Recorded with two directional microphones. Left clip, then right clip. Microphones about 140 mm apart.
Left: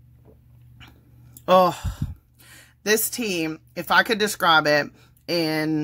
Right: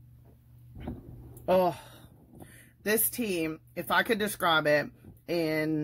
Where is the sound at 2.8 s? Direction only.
15° left (ahead or behind).